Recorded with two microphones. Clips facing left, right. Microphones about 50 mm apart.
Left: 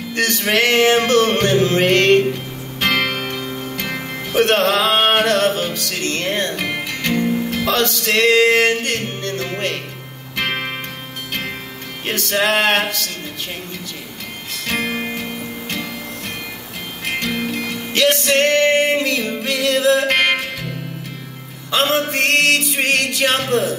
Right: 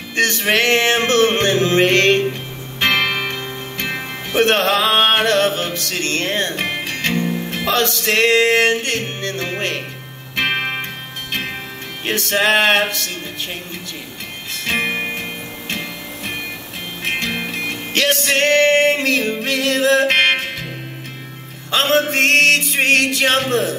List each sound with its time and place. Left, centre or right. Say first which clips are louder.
0.1 s music: right 2 dB; right
12.1 s music: right 2 dB; right
14.7 s music: right 2 dB; right
17.5 s music: left 1 dB; right
22.1 s music: right 3 dB; right